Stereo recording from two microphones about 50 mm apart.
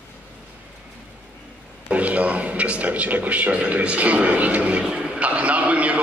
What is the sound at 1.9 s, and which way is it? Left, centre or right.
A man's voice, right.